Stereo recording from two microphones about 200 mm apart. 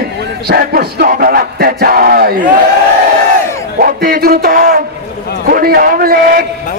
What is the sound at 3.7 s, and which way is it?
Speech, 45° right (ahead or behind).